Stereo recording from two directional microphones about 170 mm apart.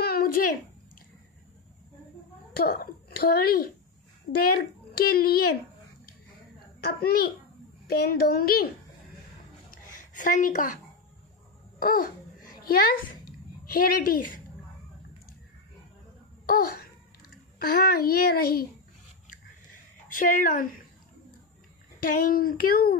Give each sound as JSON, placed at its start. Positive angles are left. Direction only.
{"t": 0.0, "sound": "a sound", "side_deg": 65}
{"t": 2.5, "sound": "a child's voice", "side_deg": 65}
{"t": 6.8, "sound": "a child's voice", "side_deg": 65}
{"t": 9.7, "sound": "a sound", "side_deg": 50}
{"t": 11.8, "sound": "a child's voice", "side_deg": 60}
{"t": 16.4, "sound": "a child's voice", "side_deg": 60}
{"t": 20.1, "sound": "a woman's voice", "side_deg": 55}
{"t": 22.0, "sound": "a child's voice", "side_deg": 60}